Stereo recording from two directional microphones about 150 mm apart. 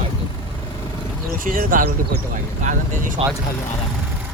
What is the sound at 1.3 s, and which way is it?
Speech, 65° right (ahead or behind).